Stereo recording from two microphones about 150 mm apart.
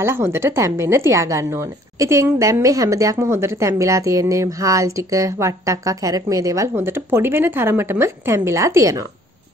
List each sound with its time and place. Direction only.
0.0 s a woman's voice: 15° right (ahead or behind)